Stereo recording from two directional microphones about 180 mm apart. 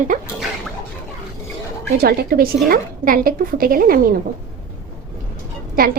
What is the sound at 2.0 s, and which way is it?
A woman's voice, 55° right (ahead or behind).